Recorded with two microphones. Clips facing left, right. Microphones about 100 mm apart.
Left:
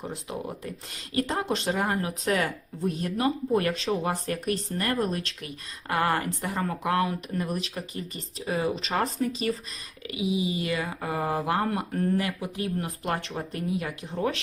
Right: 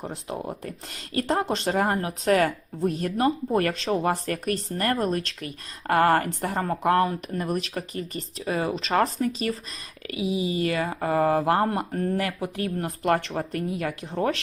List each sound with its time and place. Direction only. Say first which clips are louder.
0.6 s speech: right 1 dB; 50° right (ahead or behind)